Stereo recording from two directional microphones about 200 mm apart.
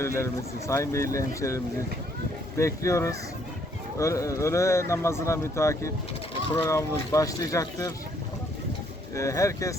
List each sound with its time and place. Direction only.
0.0 s speech: 10° left (ahead or behind)
9.1 s speech: 15° left (ahead or behind)